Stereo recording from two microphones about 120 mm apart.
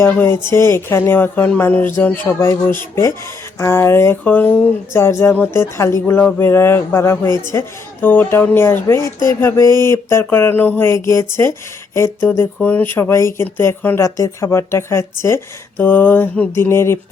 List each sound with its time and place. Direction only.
0.1 s speech: 20° left (ahead or behind)